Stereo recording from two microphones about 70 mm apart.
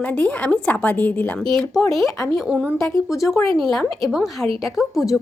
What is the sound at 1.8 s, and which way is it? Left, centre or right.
Speech, centre.